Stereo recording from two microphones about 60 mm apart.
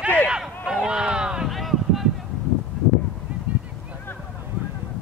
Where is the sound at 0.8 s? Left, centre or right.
Centre.